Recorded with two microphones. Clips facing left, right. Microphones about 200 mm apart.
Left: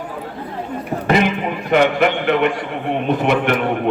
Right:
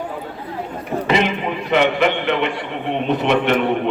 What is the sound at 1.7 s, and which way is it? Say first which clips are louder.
A man's voice: left 2 dB; 50° left (ahead or behind).